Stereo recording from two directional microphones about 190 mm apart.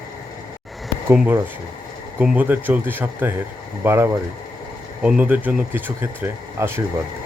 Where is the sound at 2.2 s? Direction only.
5° right (ahead or behind).